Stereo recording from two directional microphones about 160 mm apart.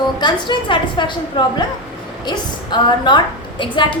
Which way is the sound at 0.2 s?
30° left (ahead or behind).